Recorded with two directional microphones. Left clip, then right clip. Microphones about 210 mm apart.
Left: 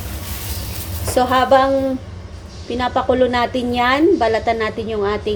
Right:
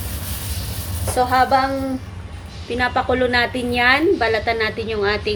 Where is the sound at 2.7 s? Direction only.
15° left (ahead or behind).